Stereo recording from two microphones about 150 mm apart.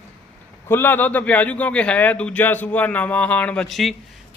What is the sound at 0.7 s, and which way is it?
A man's voice, 15° left (ahead or behind).